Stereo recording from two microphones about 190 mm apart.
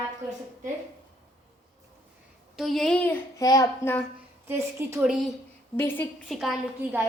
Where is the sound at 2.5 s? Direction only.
Centre (ahead or behind).